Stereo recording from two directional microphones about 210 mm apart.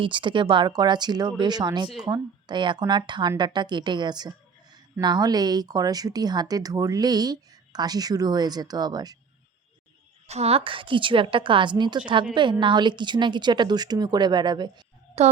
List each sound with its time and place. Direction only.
0.0 s speech: 25° right (ahead or behind)
10.2 s speech: 30° right (ahead or behind)